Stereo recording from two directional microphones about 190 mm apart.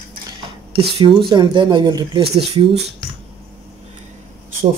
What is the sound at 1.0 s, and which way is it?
Speech, 25° right (ahead or behind).